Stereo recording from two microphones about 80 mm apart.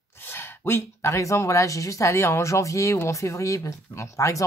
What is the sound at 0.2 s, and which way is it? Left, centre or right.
Speech, left.